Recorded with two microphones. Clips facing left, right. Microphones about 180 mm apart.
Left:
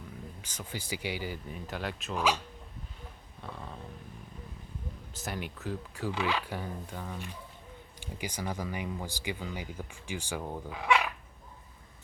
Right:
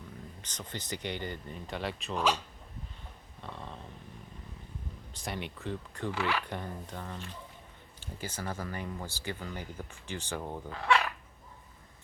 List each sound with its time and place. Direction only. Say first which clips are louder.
0.4 s speech: left 1 dB; 10° left (ahead or behind)
3.4 s a sound: left 1 dB; 5° left (ahead or behind)
5.1 s speech: even; 5° left (ahead or behind)
6.1 s speech: left 1 dB; 15° left (ahead or behind)
6.5 s speech: left 1 dB; 5° left (ahead or behind)